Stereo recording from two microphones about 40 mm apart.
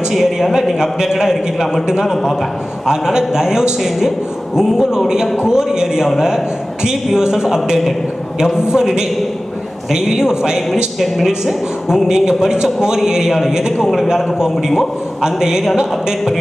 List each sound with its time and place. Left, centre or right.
0.1 s a man's voice: centre